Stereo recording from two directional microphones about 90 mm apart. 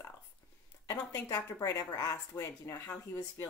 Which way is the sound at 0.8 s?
45° left (ahead or behind).